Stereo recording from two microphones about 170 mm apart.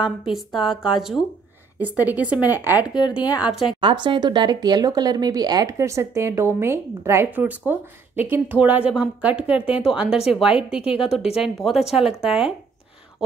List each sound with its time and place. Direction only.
0.3 s speech: centre (ahead or behind)
3.8 s speech: 30° right (ahead or behind); by 12.5 s 5° right (ahead or behind)